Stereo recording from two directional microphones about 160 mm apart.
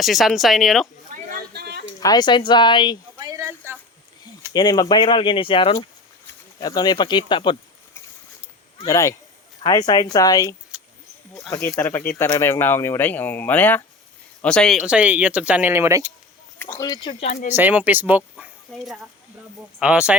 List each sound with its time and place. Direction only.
0.0 s speech: centre (ahead or behind)
1.5 s a sound: 90° right
2.0 s speech: 25° left (ahead or behind)
3.2 s a sound: 20° right (ahead or behind)
4.5 s speech: 25° left (ahead or behind)
8.9 s speech: 20° left (ahead or behind)
10.7 s wild animals: 5° right (ahead or behind)
11.8 s speech: 15° left (ahead or behind)
14.8 s speech: 5° right (ahead or behind)
16.6 s speech: 15° left (ahead or behind)
17.0 s speech: 35° left (ahead or behind)
17.5 s speech: 10° right (ahead or behind)